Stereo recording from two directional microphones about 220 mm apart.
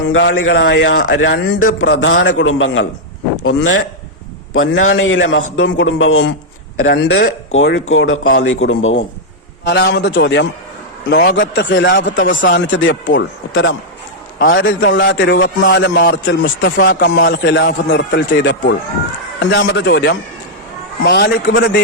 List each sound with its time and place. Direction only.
0.1 s a man's voice: 55° left (ahead or behind)
9.6 s a man's voice: 50° left (ahead or behind)
16.2 s a man's voice: 60° left (ahead or behind)